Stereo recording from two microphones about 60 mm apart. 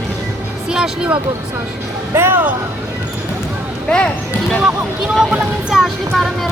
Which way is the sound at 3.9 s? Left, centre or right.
Centre.